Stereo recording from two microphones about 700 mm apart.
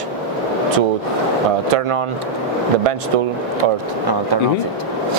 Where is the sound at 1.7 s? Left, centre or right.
Right.